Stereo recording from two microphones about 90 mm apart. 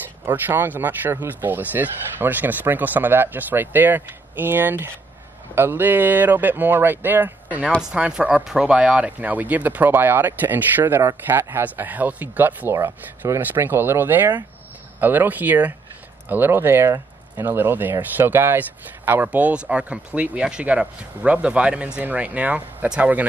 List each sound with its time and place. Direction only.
0.2 s speech: 25° right (ahead or behind)